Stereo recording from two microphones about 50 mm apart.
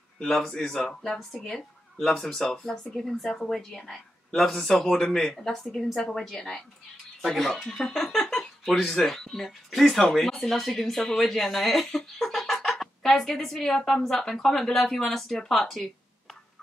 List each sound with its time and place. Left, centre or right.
0.2 s speech: centre